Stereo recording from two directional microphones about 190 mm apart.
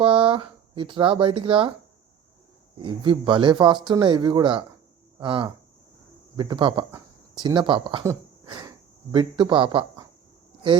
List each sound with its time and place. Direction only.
0.0 s speech: 30° right (ahead or behind)
2.7 s speech: 25° right (ahead or behind)
8.0 s a sound: 20° right (ahead or behind)
9.1 s speech: 25° right (ahead or behind)